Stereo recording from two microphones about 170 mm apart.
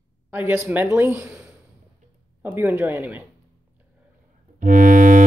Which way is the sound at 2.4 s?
10° right (ahead or behind).